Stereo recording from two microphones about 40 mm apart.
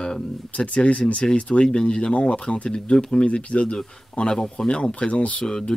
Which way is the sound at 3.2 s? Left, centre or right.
Left.